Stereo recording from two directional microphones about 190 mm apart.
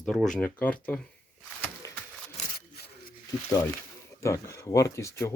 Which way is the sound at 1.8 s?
15° left (ahead or behind).